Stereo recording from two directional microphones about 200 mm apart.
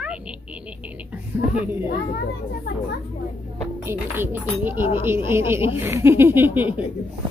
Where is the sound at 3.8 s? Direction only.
10° right (ahead or behind).